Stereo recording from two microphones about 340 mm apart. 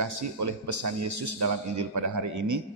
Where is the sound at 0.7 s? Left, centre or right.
Right.